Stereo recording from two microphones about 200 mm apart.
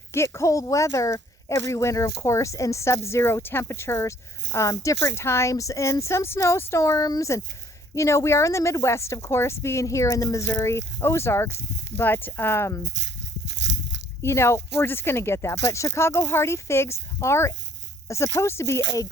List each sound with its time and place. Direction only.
0.1 s speech: 15° left (ahead or behind)
13.5 s a sound: 65° right (ahead or behind)
14.2 s speech: 15° left (ahead or behind)